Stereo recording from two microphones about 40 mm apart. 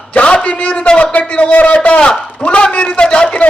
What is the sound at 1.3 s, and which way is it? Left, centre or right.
A man's voice, left.